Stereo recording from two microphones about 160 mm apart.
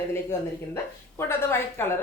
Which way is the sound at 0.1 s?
15° left (ahead or behind).